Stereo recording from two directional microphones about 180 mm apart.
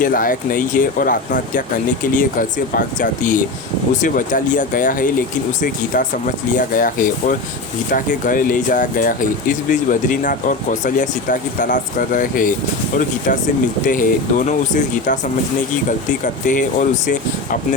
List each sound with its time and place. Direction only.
0.0 s speech: 50° left (ahead or behind)
13.8 s speech: 45° left (ahead or behind)